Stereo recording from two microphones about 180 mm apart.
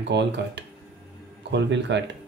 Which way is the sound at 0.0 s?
75° right (ahead or behind).